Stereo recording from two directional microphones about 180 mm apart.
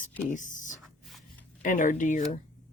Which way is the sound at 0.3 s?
45° left (ahead or behind).